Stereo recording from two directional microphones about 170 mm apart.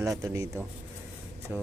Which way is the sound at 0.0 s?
20° right (ahead or behind).